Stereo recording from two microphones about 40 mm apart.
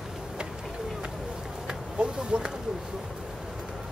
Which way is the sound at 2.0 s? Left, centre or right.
Right.